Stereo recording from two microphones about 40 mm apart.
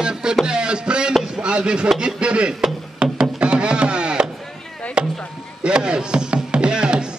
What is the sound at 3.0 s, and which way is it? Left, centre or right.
Wood, right.